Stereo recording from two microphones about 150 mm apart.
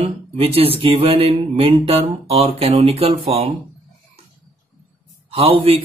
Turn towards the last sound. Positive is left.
turn(degrees=-40)  # may be behind; listen again after turning